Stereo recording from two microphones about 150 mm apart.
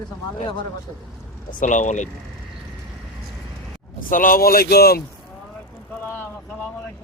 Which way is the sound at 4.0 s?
65° left (ahead or behind).